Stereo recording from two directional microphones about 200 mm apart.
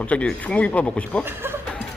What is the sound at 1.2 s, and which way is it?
Speech, 10° right (ahead or behind).